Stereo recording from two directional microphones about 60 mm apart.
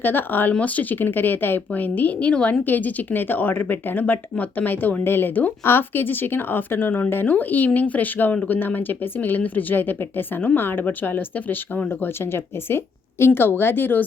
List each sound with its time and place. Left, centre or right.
0.0 s speech: left